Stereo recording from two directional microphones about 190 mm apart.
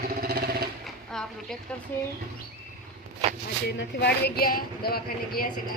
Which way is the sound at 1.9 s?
10° left (ahead or behind).